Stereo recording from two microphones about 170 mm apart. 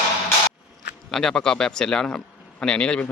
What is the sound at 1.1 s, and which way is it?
Speech, 5° left (ahead or behind).